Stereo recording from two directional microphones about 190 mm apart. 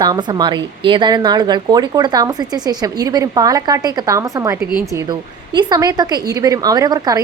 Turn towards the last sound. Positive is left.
turn(degrees=-20)  # may be behind; listen again after turning